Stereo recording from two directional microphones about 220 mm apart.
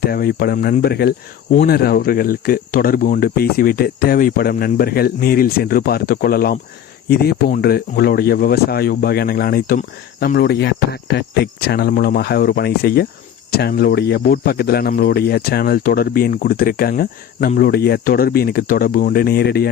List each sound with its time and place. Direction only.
0.0 s speech: 45° left (ahead or behind)